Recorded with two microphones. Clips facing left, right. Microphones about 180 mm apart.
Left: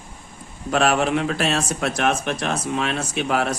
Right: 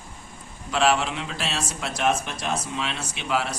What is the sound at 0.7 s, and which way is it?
Speech, 50° left (ahead or behind).